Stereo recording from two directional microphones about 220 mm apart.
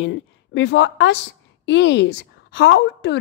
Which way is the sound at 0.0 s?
50° left (ahead or behind).